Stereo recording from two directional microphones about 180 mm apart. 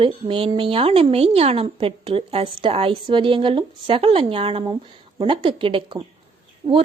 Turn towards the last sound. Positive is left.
turn(degrees=-30)  # may be behind; listen again after turning